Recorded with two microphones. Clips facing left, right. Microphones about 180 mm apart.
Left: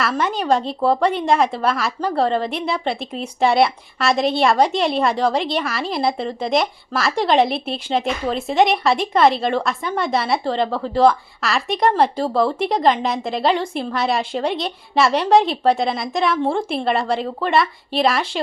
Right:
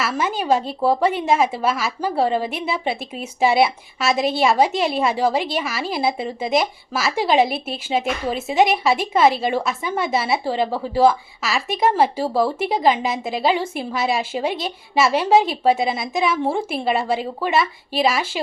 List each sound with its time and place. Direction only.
0.0 s a woman's voice: 5° right (ahead or behind)